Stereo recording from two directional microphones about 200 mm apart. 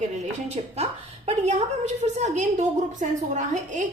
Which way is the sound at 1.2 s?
35° right (ahead or behind).